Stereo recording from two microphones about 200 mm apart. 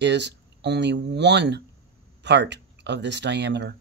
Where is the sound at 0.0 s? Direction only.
60° right (ahead or behind).